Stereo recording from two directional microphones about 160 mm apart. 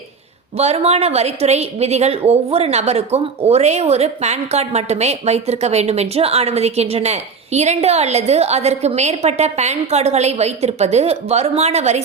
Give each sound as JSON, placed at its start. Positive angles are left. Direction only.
{"t": 0.5, "sound": "a woman's voice", "side_deg": -40}